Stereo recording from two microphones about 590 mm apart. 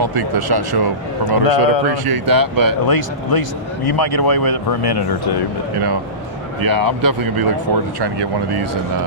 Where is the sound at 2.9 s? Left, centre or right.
Left.